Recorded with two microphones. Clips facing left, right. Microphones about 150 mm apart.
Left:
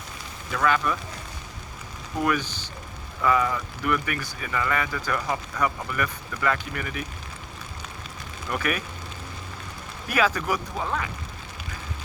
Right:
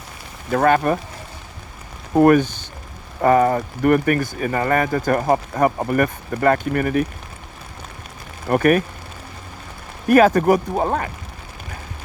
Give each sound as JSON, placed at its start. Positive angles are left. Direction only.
{"t": 0.5, "sound": "speech", "side_deg": -50}
{"t": 2.1, "sound": "speech", "side_deg": -50}
{"t": 8.4, "sound": "speech", "side_deg": -50}
{"t": 10.1, "sound": "speech", "side_deg": -50}